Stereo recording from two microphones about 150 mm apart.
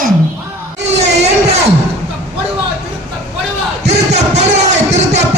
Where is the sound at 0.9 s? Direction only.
45° right (ahead or behind).